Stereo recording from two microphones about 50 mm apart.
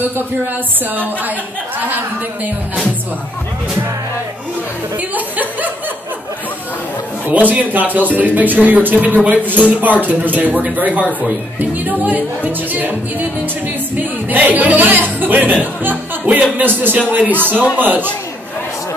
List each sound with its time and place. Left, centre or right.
5.1 s speech: right
7.2 s speech: right
13.9 s speech: right